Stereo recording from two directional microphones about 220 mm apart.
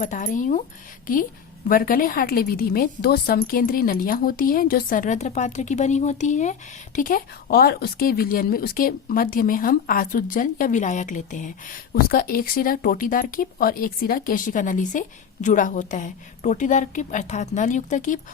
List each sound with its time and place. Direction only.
0.0 s a woman's voice: 35° left (ahead or behind)